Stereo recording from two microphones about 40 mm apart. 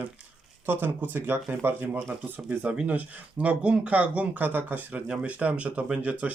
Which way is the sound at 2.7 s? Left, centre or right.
Right.